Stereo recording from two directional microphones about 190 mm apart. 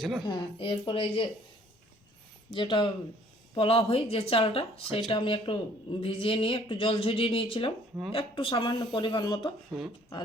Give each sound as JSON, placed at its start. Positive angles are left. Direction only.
{"t": 0.3, "sound": "speech", "side_deg": 25}
{"t": 2.5, "sound": "speech", "side_deg": 25}